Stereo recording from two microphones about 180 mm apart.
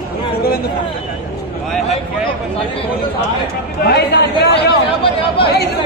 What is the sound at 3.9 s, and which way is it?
Speech, 70° left (ahead or behind).